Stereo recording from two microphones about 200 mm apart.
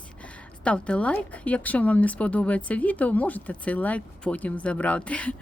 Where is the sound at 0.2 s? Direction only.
5° left (ahead or behind).